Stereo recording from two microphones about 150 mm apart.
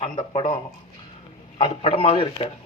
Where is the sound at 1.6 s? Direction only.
35° left (ahead or behind).